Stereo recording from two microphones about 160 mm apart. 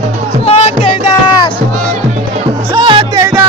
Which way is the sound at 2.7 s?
30° right (ahead or behind).